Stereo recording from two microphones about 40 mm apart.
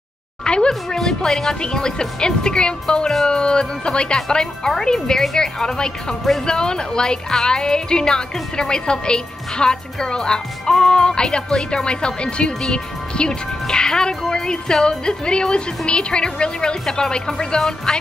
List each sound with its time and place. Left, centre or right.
0.4 s a woman's voice: centre
0.9 s speech: centre
1.5 s speech: centre